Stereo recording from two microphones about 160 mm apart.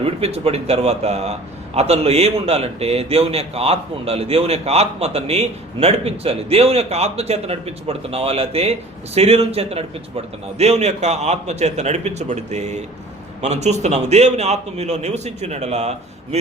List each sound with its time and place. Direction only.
0.0 s a man's voice: 40° right (ahead or behind)